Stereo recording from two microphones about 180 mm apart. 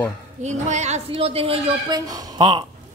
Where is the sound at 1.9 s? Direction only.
20° right (ahead or behind).